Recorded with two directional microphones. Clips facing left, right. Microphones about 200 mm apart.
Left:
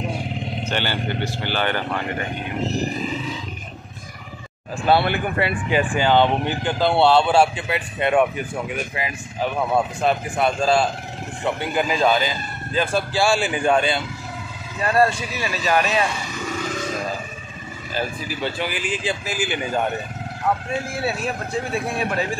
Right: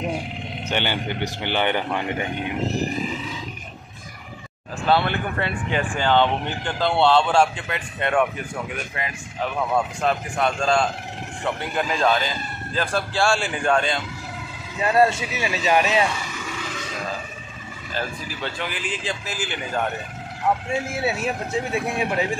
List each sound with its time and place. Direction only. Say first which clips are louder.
0.7 s speech: right 1 dB; 15° right (ahead or behind)
4.8 s speech: left 2 dB; 10° left (ahead or behind)
9.6 s a man's voice: left 2 dB; 5° left (ahead or behind)
14.8 s speech: even; 20° right (ahead or behind)
17.9 s speech: left 3 dB; 5° left (ahead or behind)
20.8 s speech: even; 20° right (ahead or behind)